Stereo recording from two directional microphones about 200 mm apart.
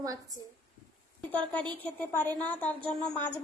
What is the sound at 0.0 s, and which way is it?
Speech, 15° right (ahead or behind).